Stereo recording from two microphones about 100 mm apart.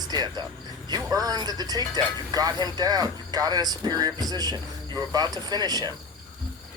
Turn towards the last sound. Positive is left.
turn(degrees=-40)  # may be behind; listen again after turning